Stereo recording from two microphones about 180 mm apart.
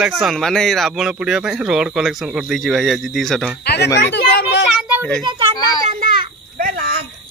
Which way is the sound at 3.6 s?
65° left (ahead or behind).